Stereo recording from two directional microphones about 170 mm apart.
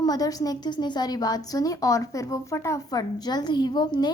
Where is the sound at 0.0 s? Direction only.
20° left (ahead or behind).